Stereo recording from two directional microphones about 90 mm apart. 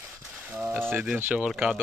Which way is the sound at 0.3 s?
15° right (ahead or behind).